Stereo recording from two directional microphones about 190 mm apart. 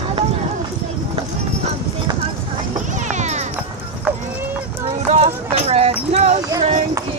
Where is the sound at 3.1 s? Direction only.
40° right (ahead or behind).